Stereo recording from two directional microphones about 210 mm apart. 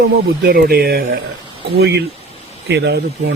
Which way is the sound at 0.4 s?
50° right (ahead or behind).